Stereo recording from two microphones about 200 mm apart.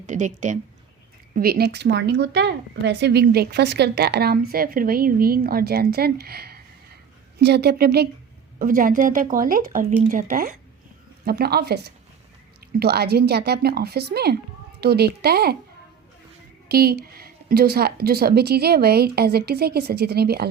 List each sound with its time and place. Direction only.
0.1 s speech: 40° right (ahead or behind)
1.4 s speech: 50° right (ahead or behind)
16.6 s speech: 50° right (ahead or behind)